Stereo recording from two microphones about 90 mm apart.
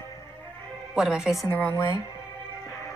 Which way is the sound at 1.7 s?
35° left (ahead or behind).